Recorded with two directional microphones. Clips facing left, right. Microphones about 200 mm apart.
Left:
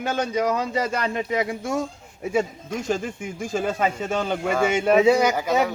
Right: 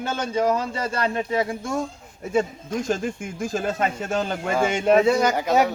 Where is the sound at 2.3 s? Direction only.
10° left (ahead or behind).